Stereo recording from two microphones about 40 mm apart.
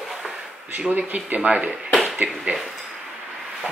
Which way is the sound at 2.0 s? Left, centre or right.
Right.